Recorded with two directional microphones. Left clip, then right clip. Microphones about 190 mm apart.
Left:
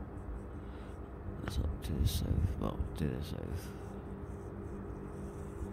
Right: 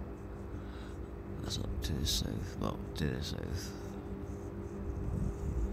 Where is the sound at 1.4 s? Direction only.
5° left (ahead or behind).